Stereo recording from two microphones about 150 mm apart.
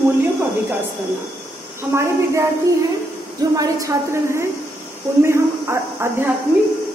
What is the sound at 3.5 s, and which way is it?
A woman's voice, 20° right (ahead or behind).